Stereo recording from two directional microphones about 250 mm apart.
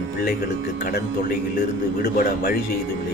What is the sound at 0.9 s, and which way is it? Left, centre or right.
Speech, left.